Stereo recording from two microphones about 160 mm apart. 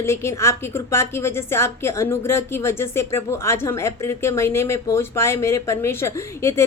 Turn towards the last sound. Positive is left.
turn(degrees=15)  # may be behind; listen again after turning